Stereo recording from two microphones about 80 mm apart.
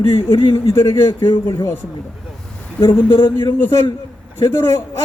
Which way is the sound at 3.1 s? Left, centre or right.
Left.